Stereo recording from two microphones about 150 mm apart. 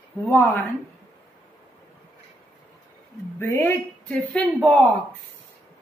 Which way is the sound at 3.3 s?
15° left (ahead or behind).